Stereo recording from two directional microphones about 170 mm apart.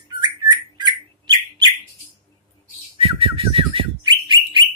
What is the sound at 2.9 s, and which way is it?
Bird, 30° right (ahead or behind).